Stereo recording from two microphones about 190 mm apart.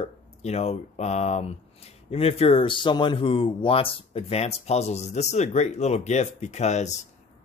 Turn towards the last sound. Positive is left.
turn(degrees=35)  # may be behind; listen again after turning